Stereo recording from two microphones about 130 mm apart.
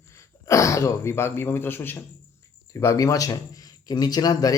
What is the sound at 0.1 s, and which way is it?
Speech, 25° left (ahead or behind).